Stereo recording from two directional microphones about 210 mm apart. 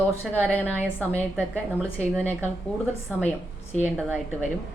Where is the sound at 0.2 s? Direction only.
5° right (ahead or behind).